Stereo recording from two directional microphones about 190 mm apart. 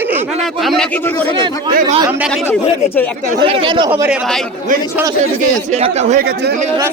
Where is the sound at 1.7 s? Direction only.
45° right (ahead or behind).